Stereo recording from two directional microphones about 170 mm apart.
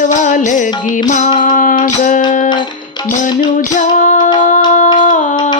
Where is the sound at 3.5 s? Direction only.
45° left (ahead or behind).